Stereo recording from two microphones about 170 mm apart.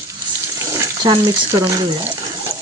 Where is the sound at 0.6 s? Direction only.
20° right (ahead or behind).